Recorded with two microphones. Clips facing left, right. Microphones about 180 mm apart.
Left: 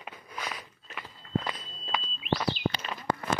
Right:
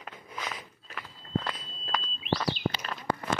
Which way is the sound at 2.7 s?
5° left (ahead or behind).